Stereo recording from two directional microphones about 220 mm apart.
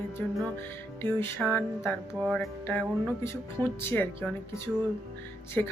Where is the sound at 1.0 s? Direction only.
10° left (ahead or behind).